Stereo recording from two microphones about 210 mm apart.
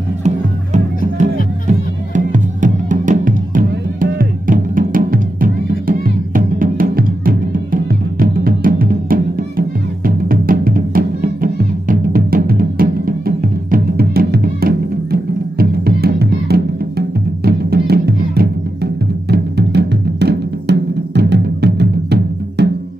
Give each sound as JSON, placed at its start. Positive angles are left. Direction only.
{"t": 1.1, "sound": "music", "side_deg": -35}